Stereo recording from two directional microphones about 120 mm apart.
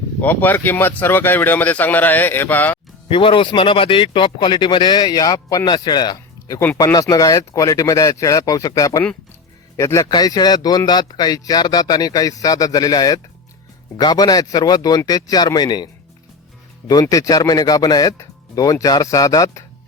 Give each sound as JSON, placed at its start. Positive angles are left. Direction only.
{"t": 0.2, "sound": "speech", "side_deg": 15}
{"t": 3.1, "sound": "speech", "side_deg": 45}
{"t": 6.6, "sound": "speech", "side_deg": 20}
{"t": 10.1, "sound": "speech", "side_deg": 35}